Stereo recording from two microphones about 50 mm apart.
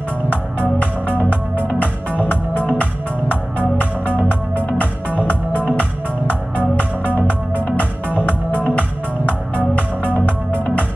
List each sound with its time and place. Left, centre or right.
2.1 s music: left
4.7 s music: left
7.7 s music: left
10.2 s music: left